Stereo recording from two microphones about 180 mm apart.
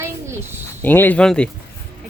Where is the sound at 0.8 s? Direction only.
10° left (ahead or behind).